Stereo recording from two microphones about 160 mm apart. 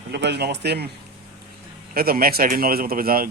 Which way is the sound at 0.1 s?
90° right.